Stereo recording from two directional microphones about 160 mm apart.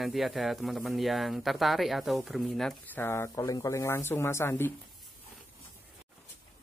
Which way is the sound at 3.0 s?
15° left (ahead or behind).